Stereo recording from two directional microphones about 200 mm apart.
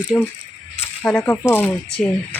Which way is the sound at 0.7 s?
10° left (ahead or behind).